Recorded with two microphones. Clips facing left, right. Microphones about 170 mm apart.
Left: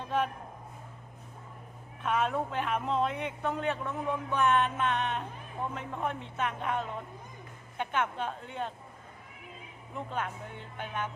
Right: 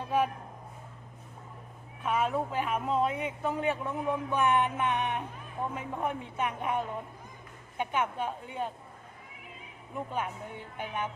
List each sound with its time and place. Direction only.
0.0 s a sound: 10° right (ahead or behind)
2.0 s a man's voice: 5° right (ahead or behind)
9.9 s a man's voice: 10° right (ahead or behind)